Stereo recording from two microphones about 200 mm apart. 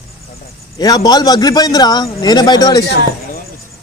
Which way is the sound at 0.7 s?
20° left (ahead or behind).